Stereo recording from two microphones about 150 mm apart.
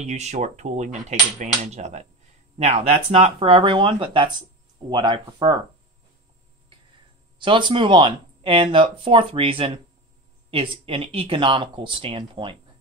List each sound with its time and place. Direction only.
0.0 s speech: 50° right (ahead or behind); by 5.6 s 30° right (ahead or behind)
7.3 s speech: 35° right (ahead or behind)